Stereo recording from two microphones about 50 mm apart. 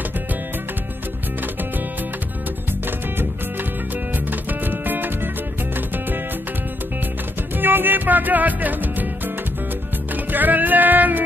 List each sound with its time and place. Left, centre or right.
4.1 s music: right
7.5 s music: right